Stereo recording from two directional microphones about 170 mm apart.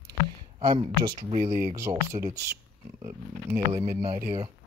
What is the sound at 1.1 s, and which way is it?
Speech, 40° right (ahead or behind).